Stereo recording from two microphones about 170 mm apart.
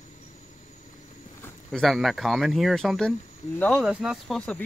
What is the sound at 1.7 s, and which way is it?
Speech, centre (ahead or behind).